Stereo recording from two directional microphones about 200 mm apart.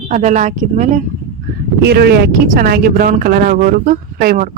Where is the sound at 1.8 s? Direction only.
55° right (ahead or behind).